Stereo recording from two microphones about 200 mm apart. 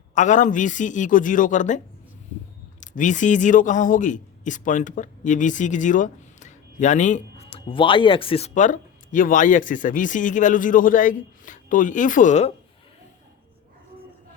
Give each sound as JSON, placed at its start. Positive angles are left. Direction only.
{"t": 0.1, "sound": "speech", "side_deg": 40}
{"t": 2.8, "sound": "speech", "side_deg": 40}